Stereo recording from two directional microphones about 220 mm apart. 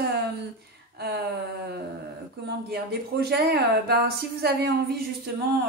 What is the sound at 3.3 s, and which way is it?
Speech, 45° right (ahead or behind).